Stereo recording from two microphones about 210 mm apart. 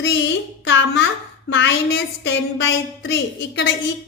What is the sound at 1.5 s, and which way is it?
A woman's voice, 60° left (ahead or behind).